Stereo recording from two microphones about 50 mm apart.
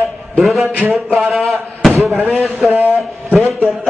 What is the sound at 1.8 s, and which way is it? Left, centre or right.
Slam, centre.